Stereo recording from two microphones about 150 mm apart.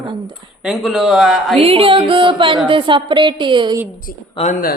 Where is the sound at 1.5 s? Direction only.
40° right (ahead or behind).